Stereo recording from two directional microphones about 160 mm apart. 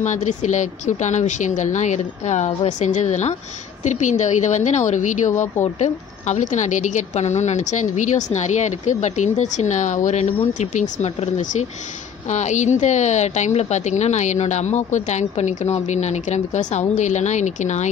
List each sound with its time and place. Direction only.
0.0 s a woman's voice: 50° left (ahead or behind)